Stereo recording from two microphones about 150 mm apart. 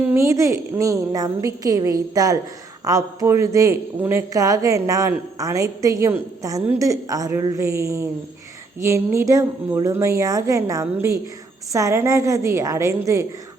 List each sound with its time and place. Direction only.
0.0 s a woman's voice: 15° right (ahead or behind)